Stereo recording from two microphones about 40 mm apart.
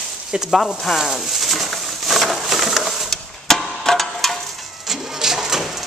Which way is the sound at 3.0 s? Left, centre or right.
Centre.